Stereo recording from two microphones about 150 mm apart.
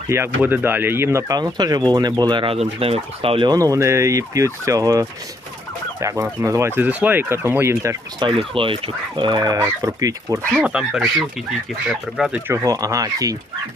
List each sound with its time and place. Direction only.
0.1 s speech: 15° right (ahead or behind)
8.2 s speech: 35° right (ahead or behind)
10.3 s speech: 5° right (ahead or behind)
12.6 s speech: 25° right (ahead or behind)